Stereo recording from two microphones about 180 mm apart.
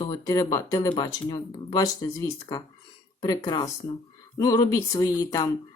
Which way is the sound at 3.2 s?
20° left (ahead or behind).